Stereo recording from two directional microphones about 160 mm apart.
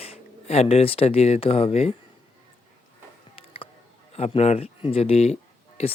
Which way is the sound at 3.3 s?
35° left (ahead or behind).